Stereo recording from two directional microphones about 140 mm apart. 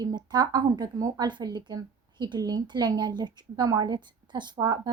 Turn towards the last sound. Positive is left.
turn(degrees=-30)  # may be behind; listen again after turning